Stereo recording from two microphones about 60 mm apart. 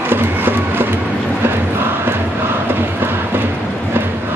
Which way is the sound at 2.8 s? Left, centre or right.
Right.